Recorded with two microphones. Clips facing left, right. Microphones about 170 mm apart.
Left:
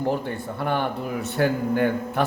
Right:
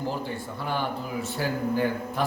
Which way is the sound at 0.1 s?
60° left (ahead or behind).